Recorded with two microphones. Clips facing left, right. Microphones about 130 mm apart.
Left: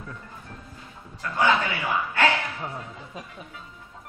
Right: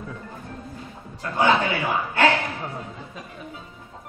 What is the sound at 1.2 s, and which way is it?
A man's voice, 20° right (ahead or behind).